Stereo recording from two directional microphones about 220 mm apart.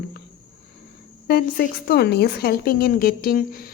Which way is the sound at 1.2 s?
45° left (ahead or behind).